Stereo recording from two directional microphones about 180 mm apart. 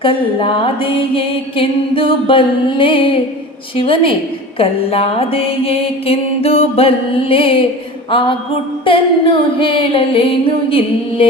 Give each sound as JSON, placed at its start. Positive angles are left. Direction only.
{"t": 0.0, "sound": "music", "side_deg": 30}
{"t": 4.5, "sound": "mantra", "side_deg": 30}
{"t": 8.1, "sound": "music", "side_deg": 30}